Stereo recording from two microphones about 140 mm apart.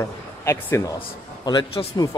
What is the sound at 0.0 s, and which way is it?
Speech, 20° left (ahead or behind).